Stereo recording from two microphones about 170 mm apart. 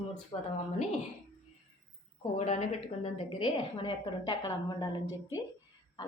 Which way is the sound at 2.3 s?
40° left (ahead or behind).